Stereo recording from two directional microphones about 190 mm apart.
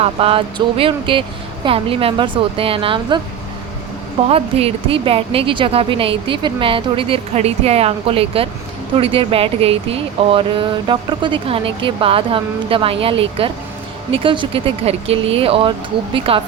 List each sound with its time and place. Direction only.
0.0 s speech: 30° right (ahead or behind)
4.3 s speech: 30° right (ahead or behind)